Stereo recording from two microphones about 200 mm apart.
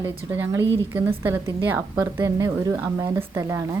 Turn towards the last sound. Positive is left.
turn(degrees=-15)  # may be behind; listen again after turning